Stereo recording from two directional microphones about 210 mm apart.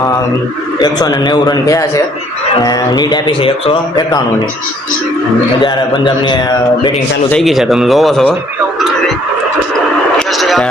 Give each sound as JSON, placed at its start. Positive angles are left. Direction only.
{"t": 0.8, "sound": "speech", "side_deg": 20}
{"t": 5.6, "sound": "speech", "side_deg": 20}
{"t": 7.3, "sound": "speech", "side_deg": 0}
{"t": 10.2, "sound": "a sound", "side_deg": 0}